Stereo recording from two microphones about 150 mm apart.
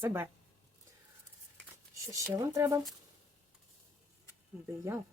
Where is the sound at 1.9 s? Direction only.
20° right (ahead or behind).